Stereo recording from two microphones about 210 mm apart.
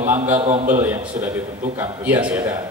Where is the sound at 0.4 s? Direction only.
30° right (ahead or behind).